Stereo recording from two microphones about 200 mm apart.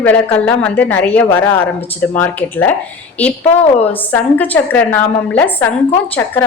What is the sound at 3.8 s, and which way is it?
A woman's voice, 10° left (ahead or behind).